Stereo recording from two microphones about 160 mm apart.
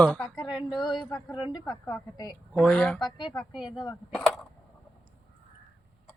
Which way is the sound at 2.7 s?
10° left (ahead or behind).